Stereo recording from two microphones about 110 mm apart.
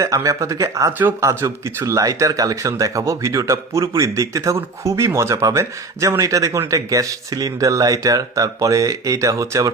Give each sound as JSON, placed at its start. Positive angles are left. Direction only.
{"t": 0.0, "sound": "speech", "side_deg": -30}